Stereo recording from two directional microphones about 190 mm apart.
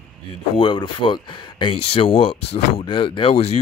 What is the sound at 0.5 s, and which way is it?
Speech, 25° left (ahead or behind).